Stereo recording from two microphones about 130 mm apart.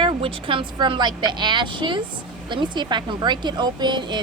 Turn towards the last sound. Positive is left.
turn(degrees=-35)  # may be behind; listen again after turning